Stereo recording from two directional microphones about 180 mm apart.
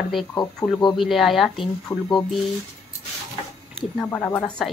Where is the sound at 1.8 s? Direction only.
20° left (ahead or behind).